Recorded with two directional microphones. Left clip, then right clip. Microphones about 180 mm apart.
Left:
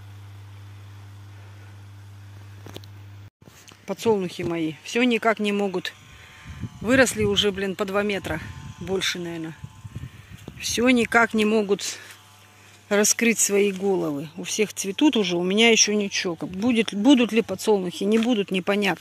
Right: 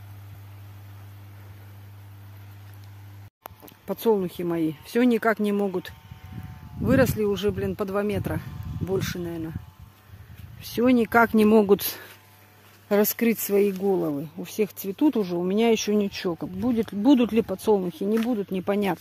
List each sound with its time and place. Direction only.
3.6 s speech: 15° right (ahead or behind)
10.6 s speech: 15° right (ahead or behind); by 12.0 s 35° right (ahead or behind)
12.8 s speech: 15° right (ahead or behind)
13.8 s speech: centre (ahead or behind); by 16.3 s 20° right (ahead or behind)
16.6 s speech: centre (ahead or behind)
18.1 s speech: 15° left (ahead or behind)
18.5 s speech: 5° right (ahead or behind)